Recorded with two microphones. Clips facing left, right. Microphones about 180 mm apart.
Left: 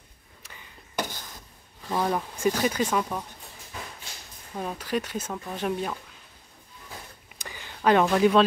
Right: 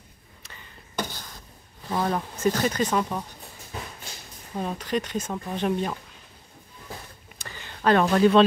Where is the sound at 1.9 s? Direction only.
5° left (ahead or behind).